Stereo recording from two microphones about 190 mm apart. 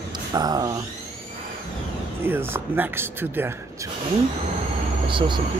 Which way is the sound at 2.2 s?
10° right (ahead or behind).